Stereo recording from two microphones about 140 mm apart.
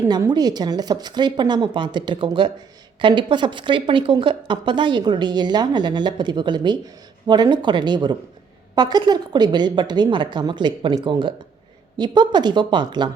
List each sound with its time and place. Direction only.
0.3 s a woman's voice: 30° right (ahead or behind)